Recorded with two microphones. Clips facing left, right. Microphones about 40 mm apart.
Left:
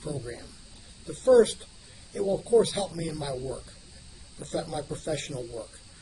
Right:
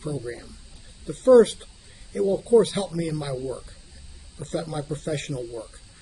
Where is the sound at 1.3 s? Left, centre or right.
Right.